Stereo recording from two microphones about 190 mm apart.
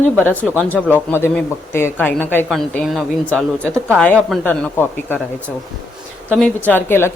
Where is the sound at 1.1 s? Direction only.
10° left (ahead or behind).